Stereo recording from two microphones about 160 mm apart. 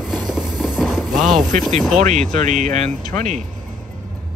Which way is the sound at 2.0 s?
45° right (ahead or behind).